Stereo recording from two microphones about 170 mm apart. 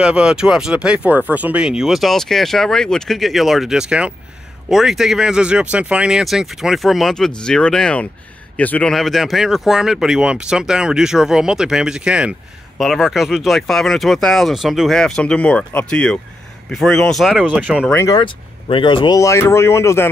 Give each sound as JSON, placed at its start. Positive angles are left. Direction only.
{"t": 0.0, "sound": "speech", "side_deg": -5}
{"t": 17.9, "sound": "speech", "side_deg": 20}